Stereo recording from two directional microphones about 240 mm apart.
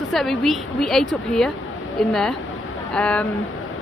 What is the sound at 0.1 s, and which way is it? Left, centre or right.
A woman's voice, centre.